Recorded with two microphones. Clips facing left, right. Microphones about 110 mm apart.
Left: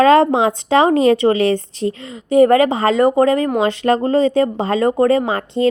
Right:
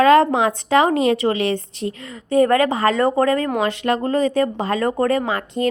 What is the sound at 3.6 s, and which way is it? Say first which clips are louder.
Speech: left 4 dB; 30° left (ahead or behind).